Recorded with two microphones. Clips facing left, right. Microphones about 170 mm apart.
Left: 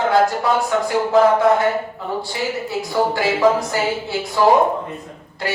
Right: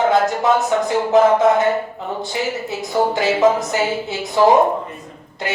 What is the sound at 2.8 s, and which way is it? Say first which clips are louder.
A woman's voice: right 1 dB; 20° right (ahead or behind).